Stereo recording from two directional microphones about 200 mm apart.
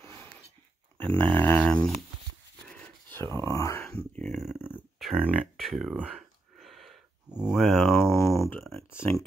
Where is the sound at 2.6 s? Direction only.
5° left (ahead or behind).